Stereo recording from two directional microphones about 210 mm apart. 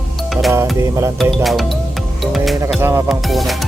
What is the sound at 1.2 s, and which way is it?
Music, centre (ahead or behind).